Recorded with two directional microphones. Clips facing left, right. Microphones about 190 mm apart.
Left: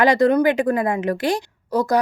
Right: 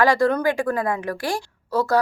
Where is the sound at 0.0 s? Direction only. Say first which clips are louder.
Left 3 dB; 20° left (ahead or behind).